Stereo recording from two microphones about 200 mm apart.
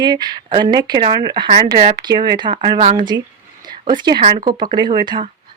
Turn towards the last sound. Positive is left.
turn(degrees=-20)  # may be behind; listen again after turning